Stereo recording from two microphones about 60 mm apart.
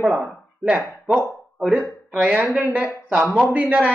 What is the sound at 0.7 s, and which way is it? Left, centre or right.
Speech, centre.